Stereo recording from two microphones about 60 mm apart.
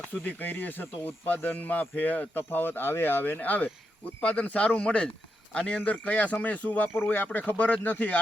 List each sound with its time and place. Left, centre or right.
0.1 s speech: left